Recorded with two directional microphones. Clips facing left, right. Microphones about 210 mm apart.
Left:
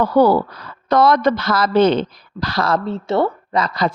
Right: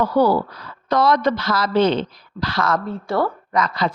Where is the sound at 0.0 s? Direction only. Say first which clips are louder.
Left 3 dB; 55° left (ahead or behind); by 3.7 s 25° left (ahead or behind).